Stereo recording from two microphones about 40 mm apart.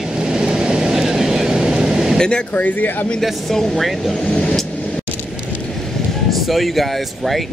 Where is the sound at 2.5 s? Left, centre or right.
Left.